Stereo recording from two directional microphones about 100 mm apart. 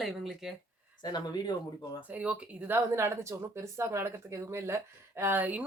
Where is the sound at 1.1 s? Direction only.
45° left (ahead or behind).